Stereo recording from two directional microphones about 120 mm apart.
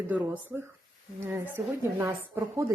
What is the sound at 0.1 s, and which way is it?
A woman's voice, 15° right (ahead or behind).